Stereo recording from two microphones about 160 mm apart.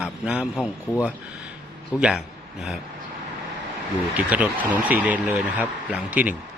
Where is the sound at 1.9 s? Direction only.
5° right (ahead or behind).